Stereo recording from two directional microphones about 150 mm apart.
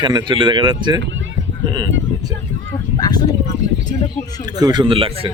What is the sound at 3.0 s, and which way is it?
Speech, 25° left (ahead or behind).